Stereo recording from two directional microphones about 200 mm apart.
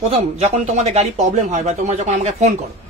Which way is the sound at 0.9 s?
35° right (ahead or behind).